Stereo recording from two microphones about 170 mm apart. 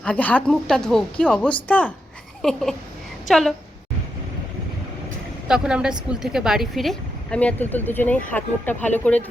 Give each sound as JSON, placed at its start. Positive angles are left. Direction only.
{"t": 0.0, "sound": "a woman's voice", "side_deg": 10}
{"t": 5.5, "sound": "a woman's voice", "side_deg": -5}